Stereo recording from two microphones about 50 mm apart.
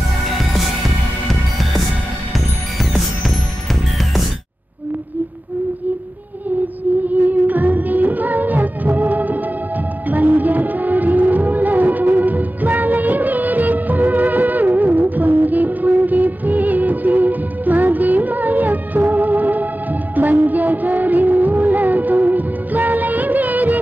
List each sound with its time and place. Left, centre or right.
0.4 s music: centre
7.1 s music: right